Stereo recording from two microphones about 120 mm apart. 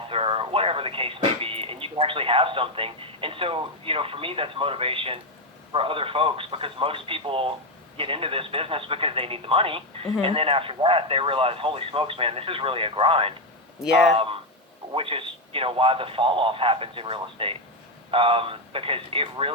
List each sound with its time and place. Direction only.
0.1 s speech: 50° right (ahead or behind)
14.9 s speech: 50° right (ahead or behind)